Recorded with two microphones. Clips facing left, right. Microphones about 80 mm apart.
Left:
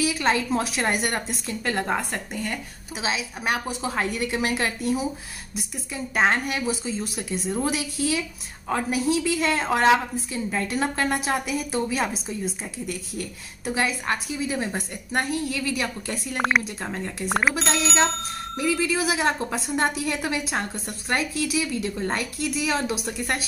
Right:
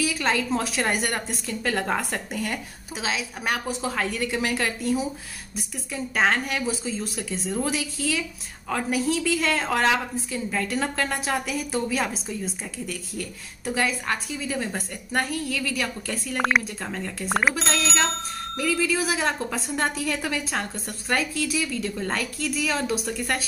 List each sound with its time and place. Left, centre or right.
0.0 s a woman's voice: centre
3.0 s a woman's voice: centre
3.9 s a woman's voice: centre
5.9 s a woman's voice: centre
8.9 s a woman's voice: centre
13.7 s a woman's voice: centre
17.3 s a woman's voice: centre